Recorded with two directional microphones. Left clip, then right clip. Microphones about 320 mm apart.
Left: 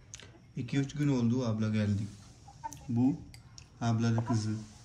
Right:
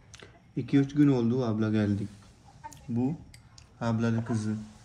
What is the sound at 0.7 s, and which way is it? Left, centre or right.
Speech, left.